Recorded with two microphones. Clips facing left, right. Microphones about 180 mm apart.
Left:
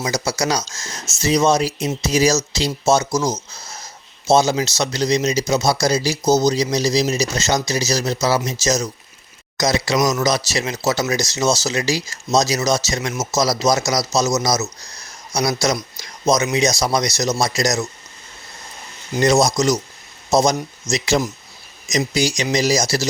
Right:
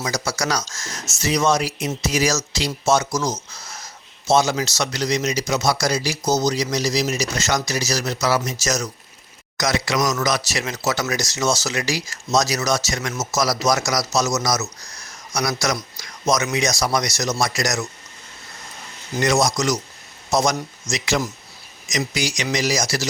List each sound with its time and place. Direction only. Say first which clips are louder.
0.0 s speech: left 3 dB; 20° left (ahead or behind)
3.5 s a sound: left 1 dB; 25° left (ahead or behind)
4.4 s speech: left 1 dB; 25° left (ahead or behind)
19.2 s speech: left 4 dB; 25° left (ahead or behind)